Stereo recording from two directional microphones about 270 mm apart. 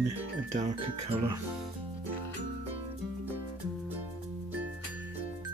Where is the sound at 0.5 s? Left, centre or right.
Right.